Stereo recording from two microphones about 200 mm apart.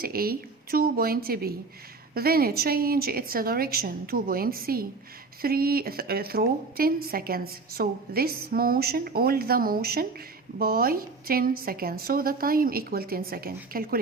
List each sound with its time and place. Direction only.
0.0 s a woman's voice: 50° right (ahead or behind)